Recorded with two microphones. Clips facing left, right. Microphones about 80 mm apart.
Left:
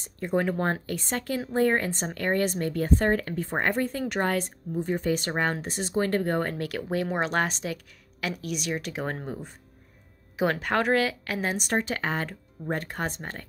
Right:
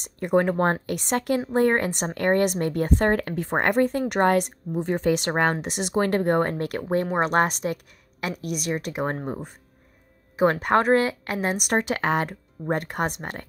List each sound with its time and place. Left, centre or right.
0.0 s speech: right
0.4 s a woman's voice: right
0.8 s speech: right
5.3 s a woman's voice: right
9.0 s speech: right
10.6 s a woman's voice: right
11.5 s speech: right